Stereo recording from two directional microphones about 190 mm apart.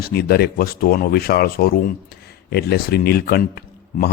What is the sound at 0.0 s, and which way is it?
Speech, 55° left (ahead or behind).